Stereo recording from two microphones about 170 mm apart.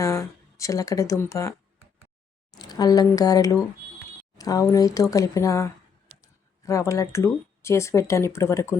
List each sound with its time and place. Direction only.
0.0 s speech: 20° left (ahead or behind)